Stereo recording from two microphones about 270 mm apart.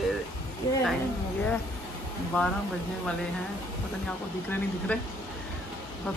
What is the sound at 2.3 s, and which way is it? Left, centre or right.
Speech, centre.